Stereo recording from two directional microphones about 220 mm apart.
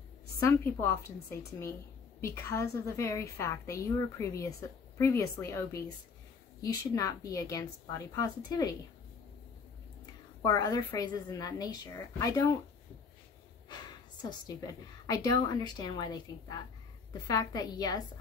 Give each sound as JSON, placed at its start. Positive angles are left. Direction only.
{"t": 0.4, "sound": "a woman's voice", "side_deg": 10}
{"t": 2.2, "sound": "a woman's voice", "side_deg": 10}
{"t": 10.4, "sound": "a woman's voice", "side_deg": 20}
{"t": 15.0, "sound": "a woman's voice", "side_deg": 20}